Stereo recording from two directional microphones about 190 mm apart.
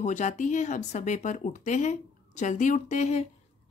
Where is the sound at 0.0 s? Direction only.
40° left (ahead or behind).